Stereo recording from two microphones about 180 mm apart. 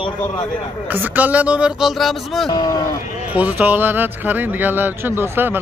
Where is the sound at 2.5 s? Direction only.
20° left (ahead or behind).